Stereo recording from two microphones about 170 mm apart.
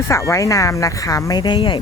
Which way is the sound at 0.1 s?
20° left (ahead or behind).